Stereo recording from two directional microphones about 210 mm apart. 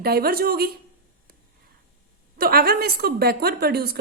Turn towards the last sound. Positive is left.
turn(degrees=-50)  # may be behind; listen again after turning